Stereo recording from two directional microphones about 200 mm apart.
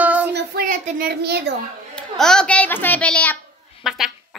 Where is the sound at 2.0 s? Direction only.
5° left (ahead or behind).